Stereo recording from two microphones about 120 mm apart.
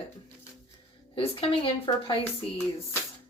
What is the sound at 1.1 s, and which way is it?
A woman's voice, 50° left (ahead or behind).